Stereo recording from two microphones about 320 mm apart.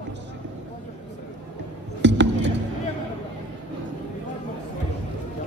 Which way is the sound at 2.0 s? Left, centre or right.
Right.